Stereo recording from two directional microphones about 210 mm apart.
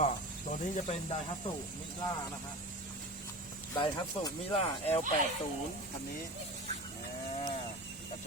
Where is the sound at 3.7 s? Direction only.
20° left (ahead or behind).